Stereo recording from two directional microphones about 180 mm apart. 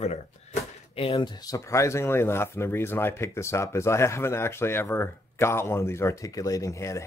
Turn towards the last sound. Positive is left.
turn(degrees=15)  # may be behind; listen again after turning